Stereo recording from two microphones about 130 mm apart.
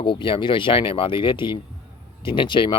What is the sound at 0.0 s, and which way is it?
Speech, 40° left (ahead or behind).